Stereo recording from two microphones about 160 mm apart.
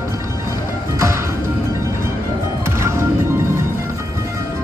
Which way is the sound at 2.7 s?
15° right (ahead or behind).